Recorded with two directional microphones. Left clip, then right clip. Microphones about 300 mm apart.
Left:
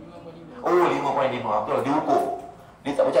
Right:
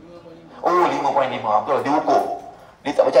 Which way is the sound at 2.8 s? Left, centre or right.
Right.